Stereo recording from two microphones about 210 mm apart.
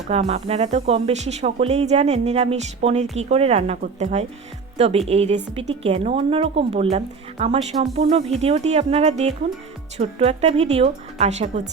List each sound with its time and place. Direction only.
0.1 s speech: 30° right (ahead or behind)